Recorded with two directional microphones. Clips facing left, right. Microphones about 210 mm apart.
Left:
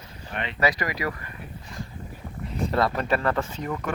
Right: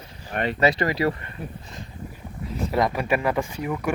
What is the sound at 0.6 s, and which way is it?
Speech, 25° right (ahead or behind).